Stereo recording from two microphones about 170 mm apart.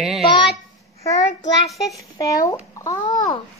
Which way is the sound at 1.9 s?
20° left (ahead or behind).